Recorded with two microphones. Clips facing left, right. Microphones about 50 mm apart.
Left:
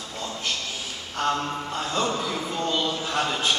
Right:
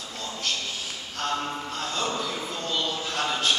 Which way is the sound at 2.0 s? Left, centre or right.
Centre.